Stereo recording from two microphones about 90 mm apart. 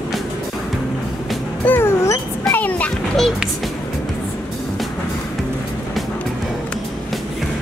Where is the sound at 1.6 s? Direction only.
20° left (ahead or behind).